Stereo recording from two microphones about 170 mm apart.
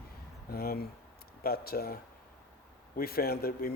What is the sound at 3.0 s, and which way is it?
Speech, 65° left (ahead or behind).